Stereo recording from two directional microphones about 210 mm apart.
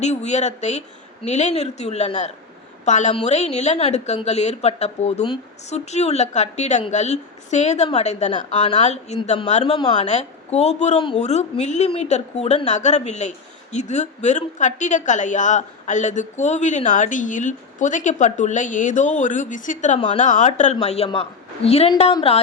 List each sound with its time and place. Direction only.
0.0 s a woman's voice: 30° left (ahead or behind)
10.1 s a woman's voice: 30° left (ahead or behind)
20.0 s a woman's voice: 25° left (ahead or behind)
20.2 s a woman's voice: 35° left (ahead or behind)